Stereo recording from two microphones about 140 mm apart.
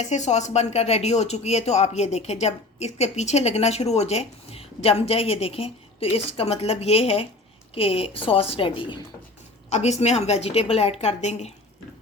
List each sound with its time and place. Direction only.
0.0 s a woman's voice: 55° left (ahead or behind); by 9.0 s 40° left (ahead or behind)
9.6 s speech: 55° left (ahead or behind)